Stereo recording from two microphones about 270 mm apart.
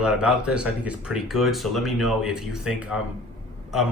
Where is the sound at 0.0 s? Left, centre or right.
Centre.